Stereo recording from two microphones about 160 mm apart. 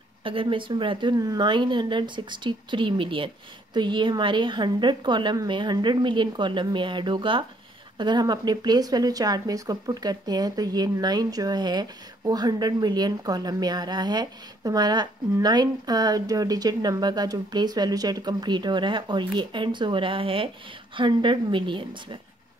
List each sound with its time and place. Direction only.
0.2 s a woman's voice: 35° right (ahead or behind)